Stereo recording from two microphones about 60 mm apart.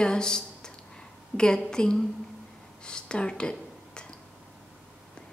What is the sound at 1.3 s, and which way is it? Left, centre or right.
Speech, centre.